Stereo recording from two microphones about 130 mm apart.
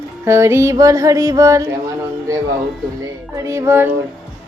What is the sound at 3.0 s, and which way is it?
Speech, 25° right (ahead or behind).